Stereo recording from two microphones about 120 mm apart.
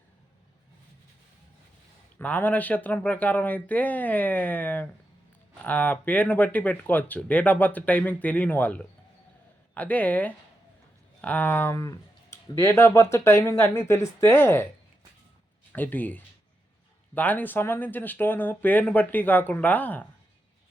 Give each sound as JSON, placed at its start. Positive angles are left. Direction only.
{"t": 2.1, "sound": "speech", "side_deg": 15}
{"t": 15.7, "sound": "speech", "side_deg": 15}